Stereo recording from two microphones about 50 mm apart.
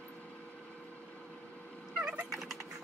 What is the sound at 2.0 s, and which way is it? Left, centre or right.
Turkey, right.